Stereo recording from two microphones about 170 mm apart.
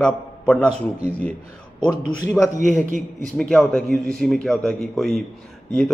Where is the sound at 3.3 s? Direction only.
5° left (ahead or behind).